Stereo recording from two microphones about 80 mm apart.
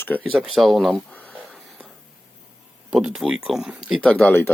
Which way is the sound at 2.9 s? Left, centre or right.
Centre.